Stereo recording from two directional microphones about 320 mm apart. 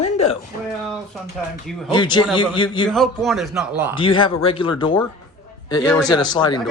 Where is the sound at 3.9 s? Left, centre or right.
Centre.